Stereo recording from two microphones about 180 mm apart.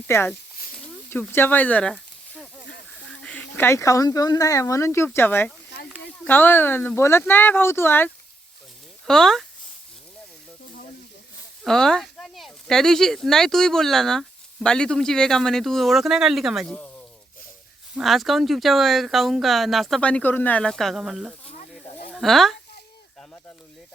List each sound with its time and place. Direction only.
0.1 s speech: 15° left (ahead or behind)
5.7 s a sound: 60° left (ahead or behind)
6.2 s speech: 10° left (ahead or behind)
11.6 s speech: 5° left (ahead or behind)
17.9 s speech: centre (ahead or behind)
21.4 s snake: 40° left (ahead or behind)
22.1 s speech: centre (ahead or behind)